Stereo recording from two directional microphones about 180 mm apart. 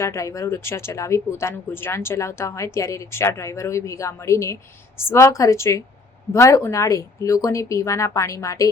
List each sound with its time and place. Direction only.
0.0 s speech: 15° left (ahead or behind)